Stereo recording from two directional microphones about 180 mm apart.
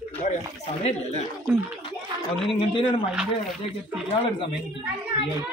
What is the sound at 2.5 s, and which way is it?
Speech, 30° left (ahead or behind).